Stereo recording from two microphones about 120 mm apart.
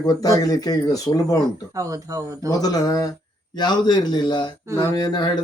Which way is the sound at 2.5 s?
30° left (ahead or behind).